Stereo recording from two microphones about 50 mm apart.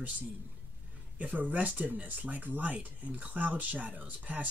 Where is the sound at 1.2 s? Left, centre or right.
Right.